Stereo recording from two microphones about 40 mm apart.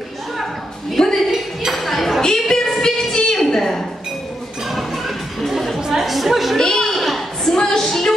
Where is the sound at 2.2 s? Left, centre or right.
Centre.